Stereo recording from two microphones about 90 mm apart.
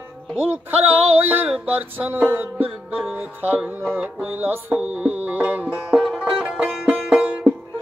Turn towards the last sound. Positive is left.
turn(degrees=-15)  # may be behind; listen again after turning